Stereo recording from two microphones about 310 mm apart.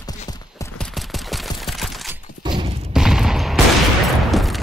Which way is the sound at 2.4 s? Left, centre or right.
Centre.